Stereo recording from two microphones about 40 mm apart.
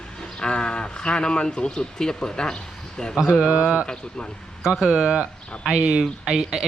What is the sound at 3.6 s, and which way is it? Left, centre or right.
Speech, right.